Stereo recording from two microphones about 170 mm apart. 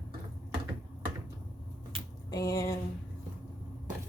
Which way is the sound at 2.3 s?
20° left (ahead or behind).